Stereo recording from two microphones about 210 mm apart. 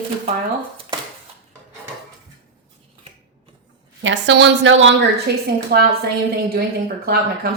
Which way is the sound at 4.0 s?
60° right (ahead or behind).